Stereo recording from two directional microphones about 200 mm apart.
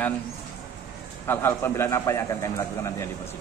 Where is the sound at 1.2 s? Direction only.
10° left (ahead or behind).